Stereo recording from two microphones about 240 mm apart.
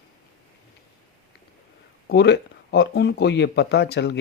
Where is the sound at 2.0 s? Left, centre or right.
Left.